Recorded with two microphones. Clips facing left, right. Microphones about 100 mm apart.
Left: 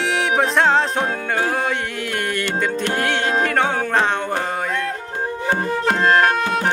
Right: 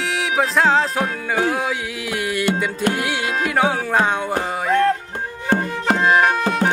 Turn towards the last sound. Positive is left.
turn(degrees=-5)  # may be behind; listen again after turning